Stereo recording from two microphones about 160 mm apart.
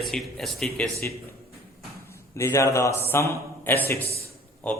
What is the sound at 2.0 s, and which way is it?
A man's voice, 15° left (ahead or behind).